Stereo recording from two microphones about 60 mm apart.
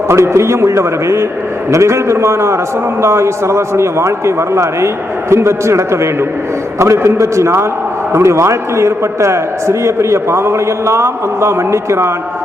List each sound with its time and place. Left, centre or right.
0.1 s a man's voice: right